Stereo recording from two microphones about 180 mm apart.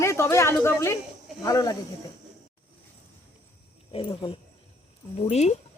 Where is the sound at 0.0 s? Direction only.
15° left (ahead or behind).